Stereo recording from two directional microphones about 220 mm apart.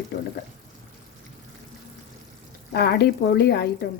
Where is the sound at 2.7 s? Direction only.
45° left (ahead or behind).